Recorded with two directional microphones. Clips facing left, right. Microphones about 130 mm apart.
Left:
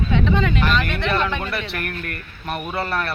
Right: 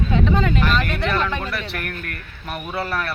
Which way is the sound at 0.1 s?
40° right (ahead or behind).